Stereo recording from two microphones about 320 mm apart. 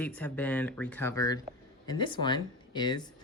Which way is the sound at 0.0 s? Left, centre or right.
Centre.